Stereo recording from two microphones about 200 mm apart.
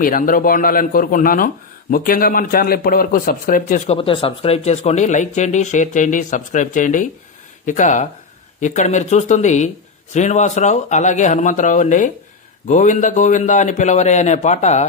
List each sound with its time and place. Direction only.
0.0 s a man's voice: 45° left (ahead or behind)